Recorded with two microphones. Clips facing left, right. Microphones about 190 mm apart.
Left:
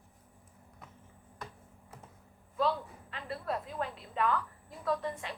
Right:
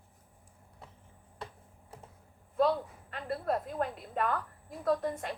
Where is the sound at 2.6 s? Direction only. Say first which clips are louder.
Right 4 dB; 50° right (ahead or behind).